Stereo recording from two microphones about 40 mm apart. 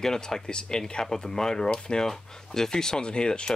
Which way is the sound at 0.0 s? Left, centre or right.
Centre.